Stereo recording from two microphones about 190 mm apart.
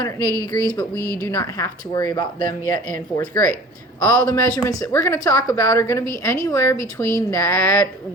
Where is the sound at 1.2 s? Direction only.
20° left (ahead or behind).